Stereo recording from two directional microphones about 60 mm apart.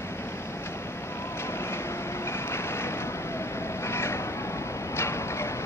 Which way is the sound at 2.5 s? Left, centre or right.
Left.